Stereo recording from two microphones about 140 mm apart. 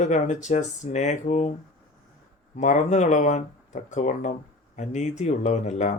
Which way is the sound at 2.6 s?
60° left (ahead or behind).